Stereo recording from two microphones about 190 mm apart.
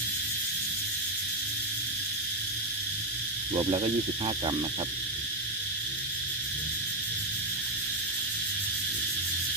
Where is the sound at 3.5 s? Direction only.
25° right (ahead or behind).